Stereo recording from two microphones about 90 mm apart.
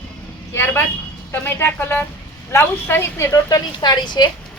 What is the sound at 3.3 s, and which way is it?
A woman's voice, 40° left (ahead or behind).